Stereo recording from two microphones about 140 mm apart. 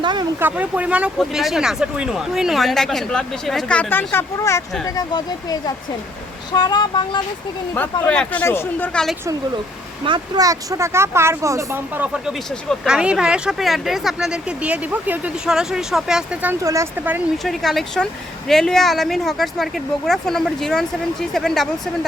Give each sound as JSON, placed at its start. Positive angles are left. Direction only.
{"t": 0.0, "sound": "a sound", "side_deg": -30}
{"t": 0.3, "sound": "speech", "side_deg": -15}
{"t": 8.0, "sound": "speech", "side_deg": 10}
{"t": 10.1, "sound": "speech", "side_deg": -25}
{"t": 16.6, "sound": "speech", "side_deg": -20}
{"t": 17.3, "sound": "speech", "side_deg": 0}